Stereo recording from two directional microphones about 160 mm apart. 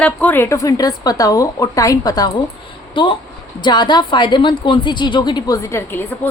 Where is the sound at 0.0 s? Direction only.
10° left (ahead or behind).